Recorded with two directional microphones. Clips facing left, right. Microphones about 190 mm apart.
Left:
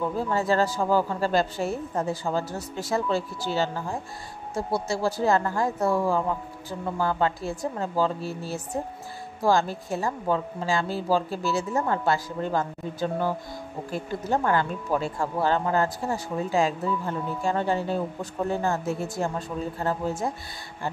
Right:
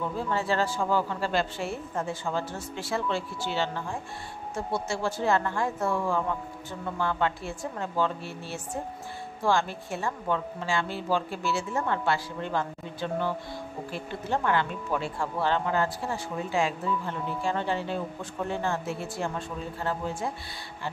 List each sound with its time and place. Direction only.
0.3 s speech: 40° left (ahead or behind)